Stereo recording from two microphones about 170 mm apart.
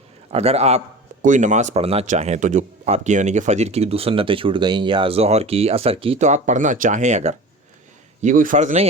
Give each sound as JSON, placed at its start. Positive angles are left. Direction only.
{"t": 0.3, "sound": "a man's voice", "side_deg": -40}